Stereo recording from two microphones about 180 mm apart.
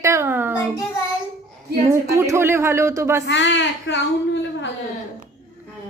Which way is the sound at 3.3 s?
85° left.